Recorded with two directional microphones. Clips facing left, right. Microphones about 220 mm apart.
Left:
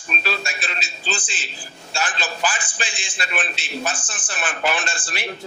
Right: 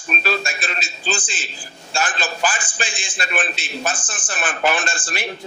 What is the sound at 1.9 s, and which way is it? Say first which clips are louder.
A man's voice: right 3 dB; 45° right (ahead or behind).